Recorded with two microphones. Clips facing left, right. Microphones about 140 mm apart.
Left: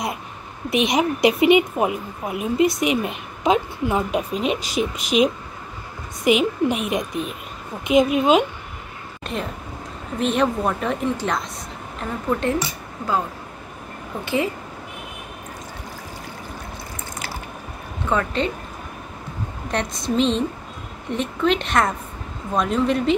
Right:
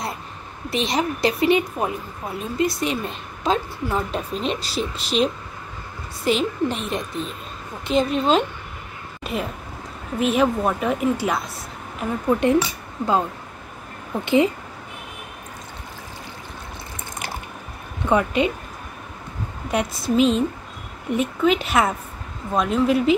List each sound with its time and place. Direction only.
0.7 s a woman's voice: 15° left (ahead or behind)
9.2 s a sound: 5° right (ahead or behind)
10.1 s a woman's voice: 5° right (ahead or behind)
14.2 s a woman's voice: 20° right (ahead or behind)
18.0 s speech: 15° right (ahead or behind)
19.7 s a woman's voice: 5° right (ahead or behind)